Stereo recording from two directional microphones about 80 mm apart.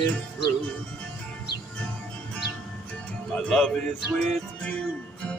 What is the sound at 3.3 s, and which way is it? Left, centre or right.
Music, centre.